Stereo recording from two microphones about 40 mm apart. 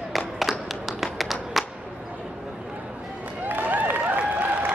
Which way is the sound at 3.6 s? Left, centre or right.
Right.